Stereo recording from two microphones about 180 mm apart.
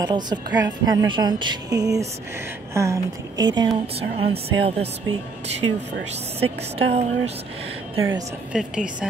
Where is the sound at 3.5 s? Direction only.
30° right (ahead or behind).